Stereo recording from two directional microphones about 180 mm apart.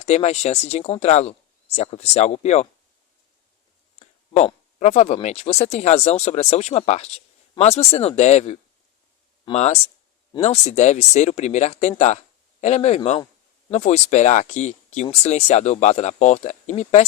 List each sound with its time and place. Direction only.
0.0 s speech: 35° left (ahead or behind)
4.0 s speech: 35° left (ahead or behind)